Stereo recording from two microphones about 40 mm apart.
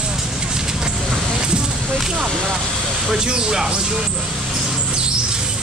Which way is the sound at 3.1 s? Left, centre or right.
Centre.